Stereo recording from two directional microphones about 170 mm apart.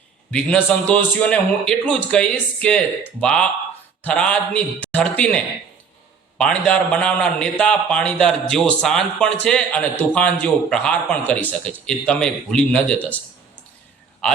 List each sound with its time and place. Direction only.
0.3 s a man's voice: 5° left (ahead or behind)
14.2 s a man's voice: 5° left (ahead or behind)